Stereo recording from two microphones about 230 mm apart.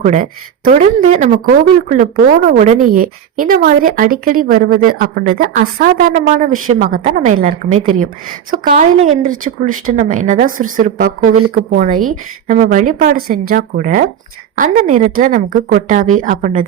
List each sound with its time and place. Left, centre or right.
0.0 s a woman's voice: right